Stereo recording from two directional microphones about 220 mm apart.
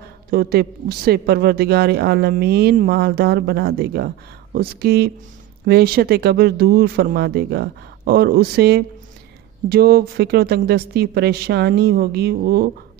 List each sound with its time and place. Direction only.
0.3 s speech: 45° right (ahead or behind)